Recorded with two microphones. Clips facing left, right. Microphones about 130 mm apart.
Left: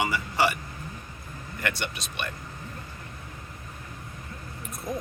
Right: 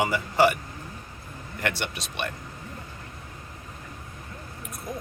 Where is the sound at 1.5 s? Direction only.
90° right.